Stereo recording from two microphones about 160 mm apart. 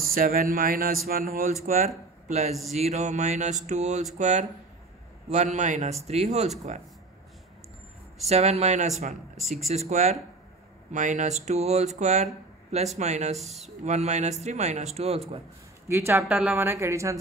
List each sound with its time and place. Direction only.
0.0 s speech: 65° right (ahead or behind); by 6.5 s 45° right (ahead or behind)
8.3 s speech: 40° right (ahead or behind)
9.4 s speech: centre (ahead or behind)
9.7 s speech: 45° right (ahead or behind)
15.9 s speech: 15° right (ahead or behind)